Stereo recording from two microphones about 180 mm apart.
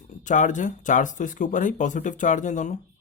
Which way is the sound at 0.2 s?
45° left (ahead or behind).